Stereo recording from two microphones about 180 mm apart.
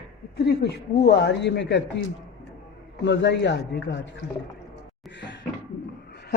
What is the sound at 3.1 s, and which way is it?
A man's voice, 75° left (ahead or behind).